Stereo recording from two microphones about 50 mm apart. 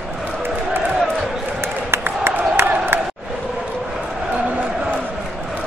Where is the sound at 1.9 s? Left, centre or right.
Right.